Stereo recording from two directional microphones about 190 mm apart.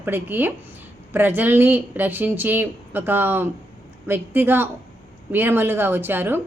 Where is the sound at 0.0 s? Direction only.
10° right (ahead or behind).